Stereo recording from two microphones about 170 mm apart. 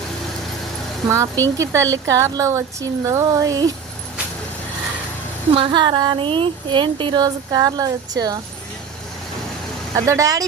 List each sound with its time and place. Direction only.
1.1 s speech: 20° right (ahead or behind)
5.5 s speech: 30° right (ahead or behind)
9.9 s speech: 20° right (ahead or behind)